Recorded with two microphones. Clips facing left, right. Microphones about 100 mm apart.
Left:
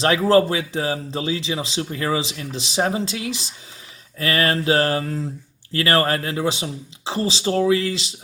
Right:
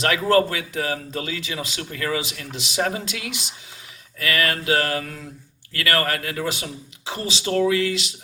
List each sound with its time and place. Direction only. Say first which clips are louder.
0.0 s speech: left 3 dB; 30° left (ahead or behind)